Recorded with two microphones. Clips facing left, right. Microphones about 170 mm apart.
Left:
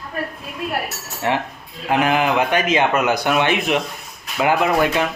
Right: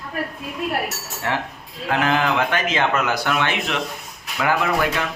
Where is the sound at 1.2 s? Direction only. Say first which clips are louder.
Left 4 dB; 20° left (ahead or behind).